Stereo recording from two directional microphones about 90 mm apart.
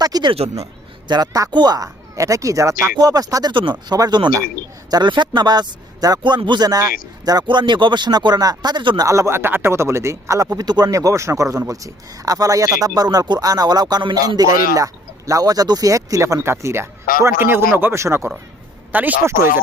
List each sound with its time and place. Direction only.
0.0 s a sound: 45° right (ahead or behind)
1.0 s speech: 50° right (ahead or behind)
3.5 s speech: 65° right (ahead or behind)
3.9 s speech: 40° right (ahead or behind)
4.9 s speech: 55° right (ahead or behind)
7.4 s speech: 60° right (ahead or behind)
9.0 s speech: 35° right (ahead or behind)
10.6 s speech: 50° right (ahead or behind); by 18.3 s 30° right (ahead or behind)
18.9 s speech: 20° right (ahead or behind)